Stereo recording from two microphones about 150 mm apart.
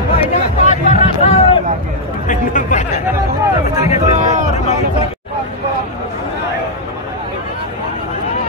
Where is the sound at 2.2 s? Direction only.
55° left (ahead or behind).